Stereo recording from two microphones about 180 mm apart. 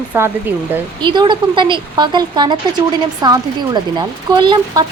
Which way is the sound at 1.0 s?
25° right (ahead or behind).